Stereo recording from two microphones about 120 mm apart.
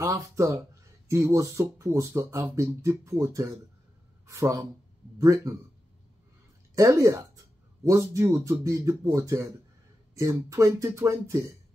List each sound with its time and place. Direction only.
0.0 s speech: 30° right (ahead or behind)
6.7 s speech: 25° right (ahead or behind)